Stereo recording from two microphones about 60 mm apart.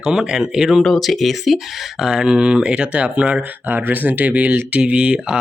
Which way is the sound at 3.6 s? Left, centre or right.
Right.